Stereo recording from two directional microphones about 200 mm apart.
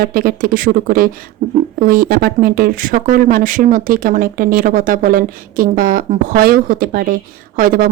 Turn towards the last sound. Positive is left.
turn(degrees=-45)  # may be behind; listen again after turning